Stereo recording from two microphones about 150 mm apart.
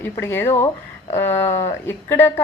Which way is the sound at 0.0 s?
15° left (ahead or behind).